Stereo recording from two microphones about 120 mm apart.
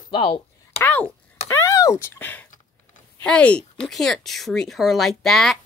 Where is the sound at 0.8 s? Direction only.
15° left (ahead or behind).